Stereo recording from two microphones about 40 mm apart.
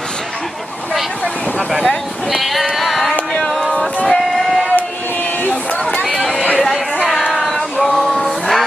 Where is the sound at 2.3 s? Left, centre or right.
Centre.